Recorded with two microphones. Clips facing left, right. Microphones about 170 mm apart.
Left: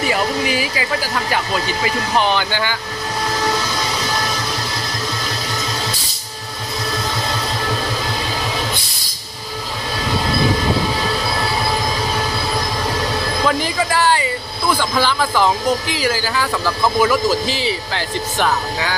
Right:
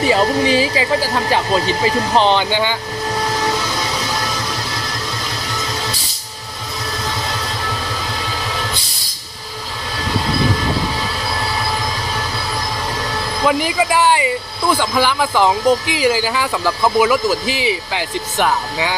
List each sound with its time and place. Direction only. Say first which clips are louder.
0.1 s speech: right 7 dB; 30° right (ahead or behind)
13.4 s speech: right 4 dB; 15° right (ahead or behind)